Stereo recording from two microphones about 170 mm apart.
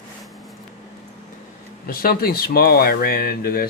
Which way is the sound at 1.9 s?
60° left (ahead or behind).